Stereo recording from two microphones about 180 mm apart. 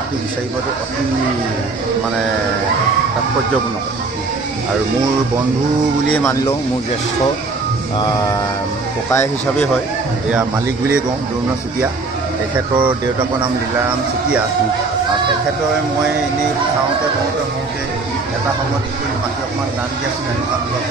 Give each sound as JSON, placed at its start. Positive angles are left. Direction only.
{"t": 6.0, "sound": "speech", "side_deg": 10}
{"t": 8.0, "sound": "speech", "side_deg": 20}